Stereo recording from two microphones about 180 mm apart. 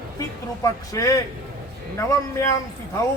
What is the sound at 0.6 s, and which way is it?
A man's voice, 20° left (ahead or behind).